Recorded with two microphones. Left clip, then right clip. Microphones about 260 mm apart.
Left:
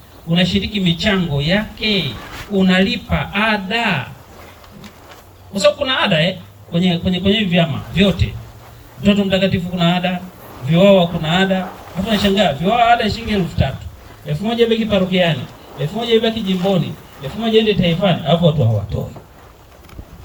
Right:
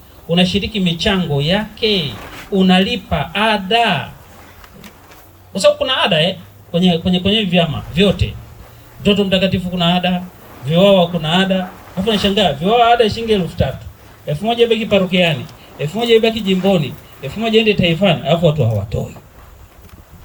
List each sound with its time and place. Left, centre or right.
0.3 s speech: right
5.5 s a man's voice: right